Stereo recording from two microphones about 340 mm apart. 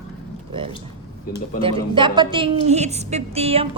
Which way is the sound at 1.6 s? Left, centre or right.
Centre.